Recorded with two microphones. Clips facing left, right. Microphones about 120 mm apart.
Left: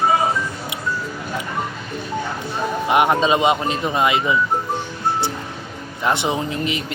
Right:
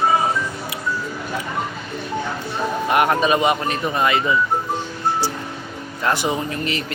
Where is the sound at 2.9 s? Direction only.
20° left (ahead or behind).